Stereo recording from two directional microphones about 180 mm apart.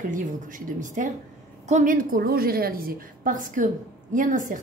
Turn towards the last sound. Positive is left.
turn(degrees=-45)  # may be behind; listen again after turning